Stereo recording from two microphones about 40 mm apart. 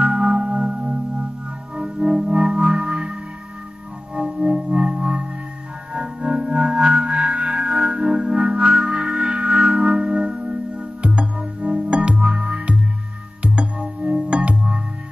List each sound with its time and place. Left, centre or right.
0.0 s singing bowl: centre
1.8 s music: centre